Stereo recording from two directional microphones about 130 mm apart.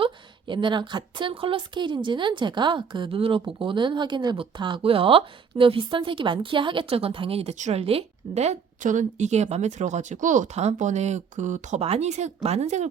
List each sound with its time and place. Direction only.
0.0 s a woman's voice: 40° right (ahead or behind)
7.5 s a woman's voice: 60° right (ahead or behind)